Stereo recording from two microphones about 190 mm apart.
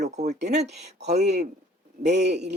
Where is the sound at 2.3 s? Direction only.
65° right (ahead or behind).